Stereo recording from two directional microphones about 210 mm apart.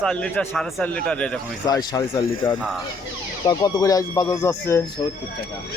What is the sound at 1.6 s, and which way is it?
Speech, 20° left (ahead or behind).